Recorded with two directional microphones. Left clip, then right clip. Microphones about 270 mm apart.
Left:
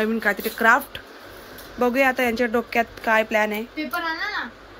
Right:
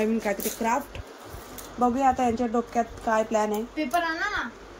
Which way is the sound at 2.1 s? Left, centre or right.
Centre.